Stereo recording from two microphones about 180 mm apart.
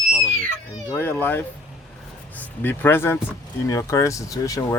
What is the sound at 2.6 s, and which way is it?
A man's voice, 10° left (ahead or behind).